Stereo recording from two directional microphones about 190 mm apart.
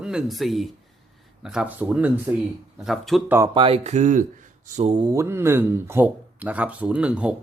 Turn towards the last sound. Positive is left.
turn(degrees=-5)  # may be behind; listen again after turning